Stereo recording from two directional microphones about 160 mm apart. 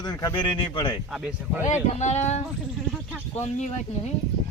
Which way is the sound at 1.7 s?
45° left (ahead or behind).